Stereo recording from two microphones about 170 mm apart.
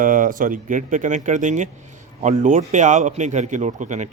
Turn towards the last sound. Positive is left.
turn(degrees=-45)  # may be behind; listen again after turning